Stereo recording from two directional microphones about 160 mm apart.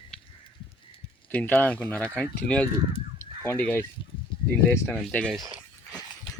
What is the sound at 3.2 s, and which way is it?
Fowl, 15° left (ahead or behind).